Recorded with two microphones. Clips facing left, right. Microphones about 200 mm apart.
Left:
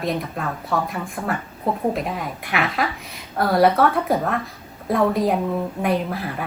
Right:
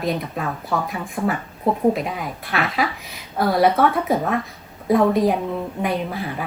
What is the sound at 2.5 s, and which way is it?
Speech, 15° left (ahead or behind).